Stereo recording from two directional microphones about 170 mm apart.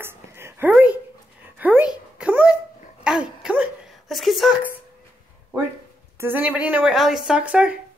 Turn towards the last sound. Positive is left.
turn(degrees=-10)  # may be behind; listen again after turning